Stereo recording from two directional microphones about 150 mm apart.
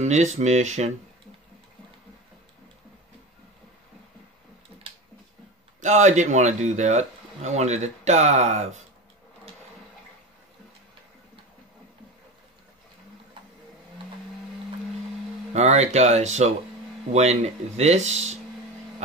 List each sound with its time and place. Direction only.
0.0 s speech: 50° right (ahead or behind)
5.8 s speech: 55° right (ahead or behind)
15.5 s speech: 50° right (ahead or behind)